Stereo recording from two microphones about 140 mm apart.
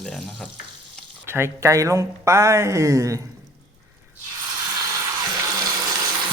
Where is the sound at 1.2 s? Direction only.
20° right (ahead or behind).